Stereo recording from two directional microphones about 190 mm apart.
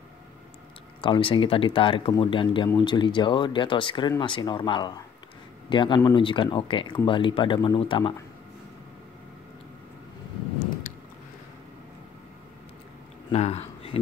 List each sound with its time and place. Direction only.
1.0 s speech: 25° left (ahead or behind)
13.3 s speech: 35° left (ahead or behind)